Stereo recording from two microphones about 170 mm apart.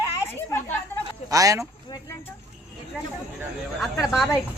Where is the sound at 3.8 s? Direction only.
Centre (ahead or behind).